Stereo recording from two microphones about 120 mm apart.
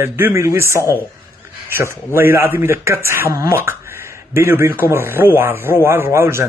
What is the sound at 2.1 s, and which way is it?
Speech, 20° right (ahead or behind).